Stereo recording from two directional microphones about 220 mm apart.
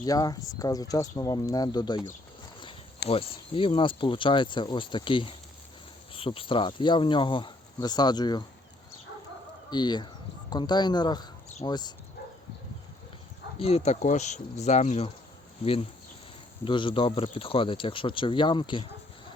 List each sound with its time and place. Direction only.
0.0 s speech: 15° left (ahead or behind)
3.1 s speech: 25° left (ahead or behind)
9.6 s speech: 20° left (ahead or behind)
13.6 s speech: 30° left (ahead or behind)
16.6 s speech: 20° left (ahead or behind)